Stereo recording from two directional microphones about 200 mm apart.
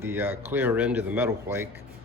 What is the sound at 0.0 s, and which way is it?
Speech, 10° right (ahead or behind).